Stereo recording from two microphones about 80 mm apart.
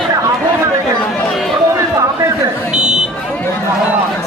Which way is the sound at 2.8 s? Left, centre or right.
Centre.